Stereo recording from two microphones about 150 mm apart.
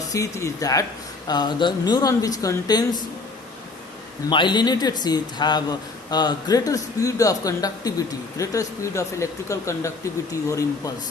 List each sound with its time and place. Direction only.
0.1 s speech: 20° left (ahead or behind)
4.3 s speech: 30° left (ahead or behind)